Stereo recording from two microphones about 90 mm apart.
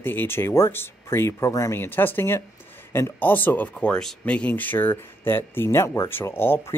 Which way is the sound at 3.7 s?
10° left (ahead or behind).